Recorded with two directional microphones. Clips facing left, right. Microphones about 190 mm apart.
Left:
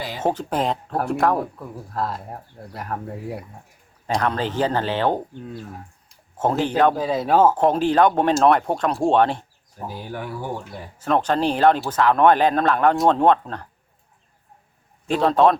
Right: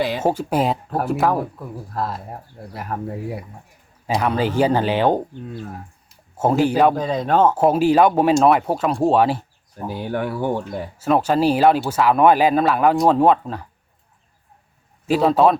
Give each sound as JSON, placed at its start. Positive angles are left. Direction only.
{"t": 0.2, "sound": "speech", "side_deg": -10}
{"t": 6.9, "sound": "speech", "side_deg": 5}
{"t": 7.5, "sound": "speech", "side_deg": -10}
{"t": 9.9, "sound": "speech", "side_deg": -65}
{"t": 10.9, "sound": "speech", "side_deg": -5}
{"t": 15.0, "sound": "speech", "side_deg": -5}